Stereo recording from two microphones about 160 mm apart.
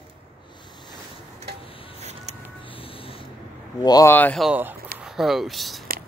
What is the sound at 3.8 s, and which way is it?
Speech, 20° left (ahead or behind).